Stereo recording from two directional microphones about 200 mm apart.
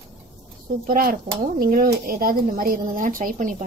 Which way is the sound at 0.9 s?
45° right (ahead or behind).